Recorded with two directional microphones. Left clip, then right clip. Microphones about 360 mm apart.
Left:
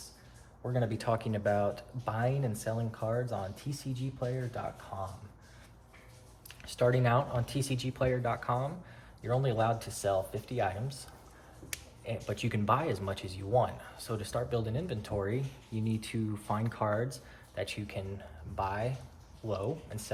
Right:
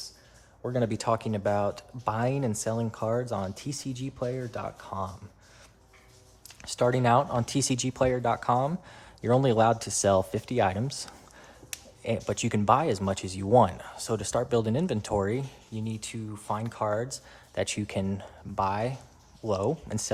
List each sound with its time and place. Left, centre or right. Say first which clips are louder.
0.6 s speech: right 5 dB; centre
6.6 s speech: right 4 dB; centre